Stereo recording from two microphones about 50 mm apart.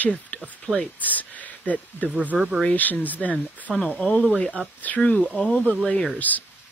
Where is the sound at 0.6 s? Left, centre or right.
Centre.